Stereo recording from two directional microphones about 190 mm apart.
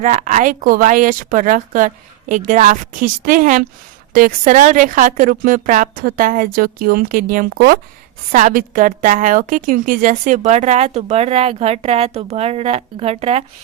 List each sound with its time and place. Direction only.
0.0 s a woman's voice: 40° right (ahead or behind)